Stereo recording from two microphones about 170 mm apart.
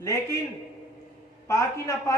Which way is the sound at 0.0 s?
20° left (ahead or behind).